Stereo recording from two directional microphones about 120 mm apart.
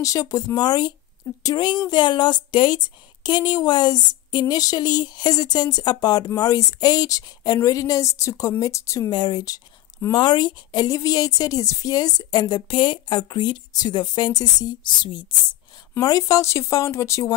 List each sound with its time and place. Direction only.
0.0 s speech: 30° left (ahead or behind)
16.0 s speech: 30° left (ahead or behind)